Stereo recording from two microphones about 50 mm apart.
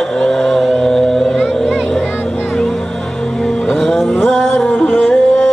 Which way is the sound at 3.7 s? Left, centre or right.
Centre.